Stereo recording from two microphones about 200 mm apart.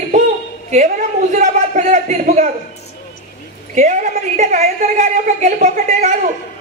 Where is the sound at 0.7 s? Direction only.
35° right (ahead or behind).